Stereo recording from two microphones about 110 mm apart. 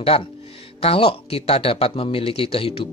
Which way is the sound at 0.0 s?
60° left (ahead or behind).